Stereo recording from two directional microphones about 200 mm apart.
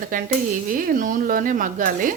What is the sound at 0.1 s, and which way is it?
Speech, 40° right (ahead or behind).